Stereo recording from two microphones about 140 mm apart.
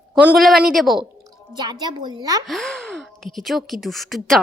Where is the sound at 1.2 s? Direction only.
30° right (ahead or behind).